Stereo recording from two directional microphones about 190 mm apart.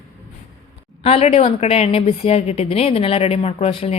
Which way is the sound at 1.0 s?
30° left (ahead or behind).